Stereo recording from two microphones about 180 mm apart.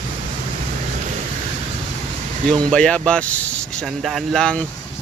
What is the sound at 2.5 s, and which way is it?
Speech, 5° left (ahead or behind).